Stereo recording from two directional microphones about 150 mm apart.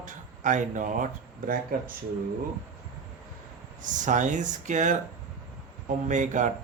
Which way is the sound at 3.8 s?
55° right (ahead or behind).